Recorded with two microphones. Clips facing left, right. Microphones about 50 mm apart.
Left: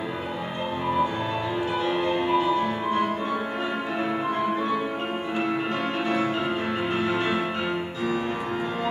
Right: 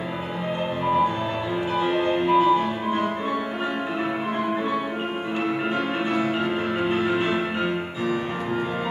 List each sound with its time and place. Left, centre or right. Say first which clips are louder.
1.8 s music: right 4 dB; centre
6.9 s music: right 2 dB; centre